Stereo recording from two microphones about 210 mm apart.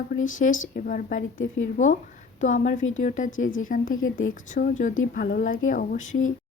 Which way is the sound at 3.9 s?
70° left (ahead or behind).